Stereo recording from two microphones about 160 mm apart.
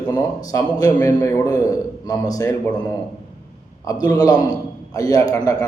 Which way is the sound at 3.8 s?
20° left (ahead or behind).